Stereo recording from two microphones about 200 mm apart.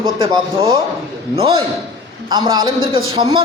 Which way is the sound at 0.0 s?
20° right (ahead or behind).